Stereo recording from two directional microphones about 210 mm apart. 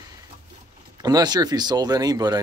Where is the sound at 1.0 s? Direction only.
20° right (ahead or behind).